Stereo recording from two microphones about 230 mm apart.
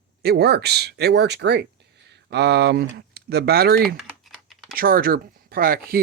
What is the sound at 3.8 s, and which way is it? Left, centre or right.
Typing, centre.